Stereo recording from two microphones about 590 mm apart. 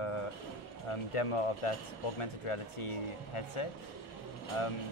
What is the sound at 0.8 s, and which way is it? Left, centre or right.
Speech, left.